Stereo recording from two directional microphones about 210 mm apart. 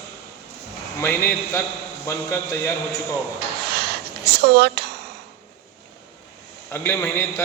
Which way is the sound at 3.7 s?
50° right (ahead or behind).